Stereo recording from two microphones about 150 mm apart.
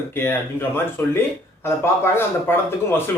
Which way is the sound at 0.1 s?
15° left (ahead or behind).